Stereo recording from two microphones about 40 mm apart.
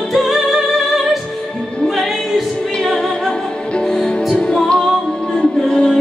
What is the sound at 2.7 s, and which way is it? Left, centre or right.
Music, centre.